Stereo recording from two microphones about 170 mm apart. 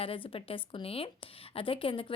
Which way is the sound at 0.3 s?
30° left (ahead or behind).